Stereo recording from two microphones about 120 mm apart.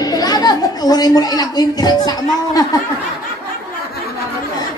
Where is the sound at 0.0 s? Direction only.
35° left (ahead or behind).